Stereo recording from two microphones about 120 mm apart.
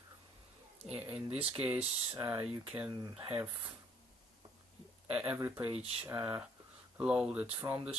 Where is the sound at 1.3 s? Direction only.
55° right (ahead or behind).